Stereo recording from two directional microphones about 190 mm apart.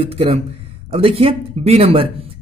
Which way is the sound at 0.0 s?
30° right (ahead or behind).